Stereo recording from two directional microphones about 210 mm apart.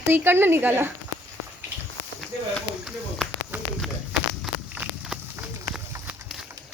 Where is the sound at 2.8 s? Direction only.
Centre (ahead or behind).